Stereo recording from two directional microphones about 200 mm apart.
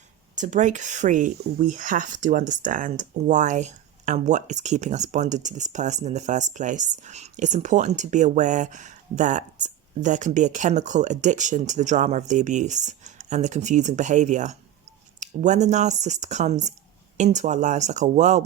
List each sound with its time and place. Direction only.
0.3 s speech: 40° right (ahead or behind)